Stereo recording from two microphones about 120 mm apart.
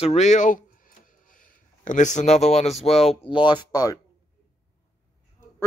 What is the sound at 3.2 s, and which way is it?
Speech, 40° left (ahead or behind).